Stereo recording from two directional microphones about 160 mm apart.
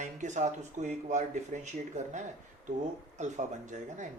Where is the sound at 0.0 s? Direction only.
50° right (ahead or behind).